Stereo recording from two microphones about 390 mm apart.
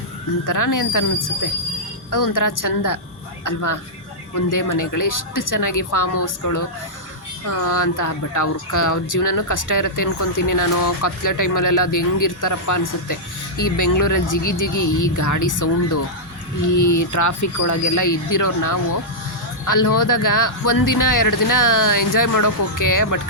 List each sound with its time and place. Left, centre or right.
0.4 s speech: left